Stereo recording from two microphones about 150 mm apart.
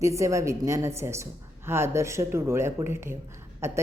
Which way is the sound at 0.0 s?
20° right (ahead or behind).